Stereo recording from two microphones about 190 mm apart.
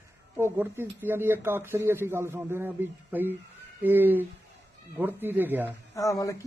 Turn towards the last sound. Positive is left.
turn(degrees=15)  # may be behind; listen again after turning